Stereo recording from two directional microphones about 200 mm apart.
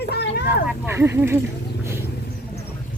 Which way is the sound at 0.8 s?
10° right (ahead or behind).